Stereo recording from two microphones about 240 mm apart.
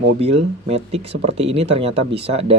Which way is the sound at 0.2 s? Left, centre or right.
Right.